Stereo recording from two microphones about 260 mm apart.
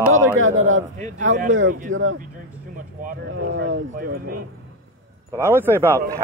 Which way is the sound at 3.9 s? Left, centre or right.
Right.